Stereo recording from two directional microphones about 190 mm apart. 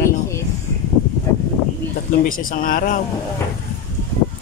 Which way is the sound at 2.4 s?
45° left (ahead or behind).